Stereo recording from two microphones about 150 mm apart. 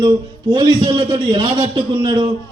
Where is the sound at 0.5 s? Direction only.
30° right (ahead or behind).